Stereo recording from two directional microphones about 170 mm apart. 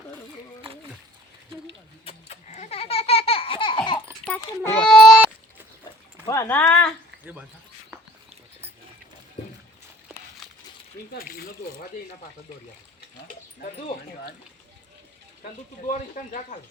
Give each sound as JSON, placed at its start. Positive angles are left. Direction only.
{"t": 2.0, "sound": "a sound", "side_deg": 40}
{"t": 4.6, "sound": "baby cry", "side_deg": 5}
{"t": 6.2, "sound": "speech", "side_deg": 15}
{"t": 11.1, "sound": "speech", "side_deg": 65}
{"t": 15.9, "sound": "speech", "side_deg": 45}